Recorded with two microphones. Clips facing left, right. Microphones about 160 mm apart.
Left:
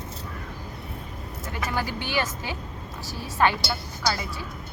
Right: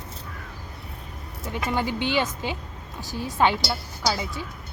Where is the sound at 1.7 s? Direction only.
20° right (ahead or behind).